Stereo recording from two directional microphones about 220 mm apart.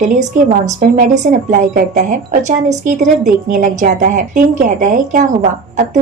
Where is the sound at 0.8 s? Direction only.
35° right (ahead or behind).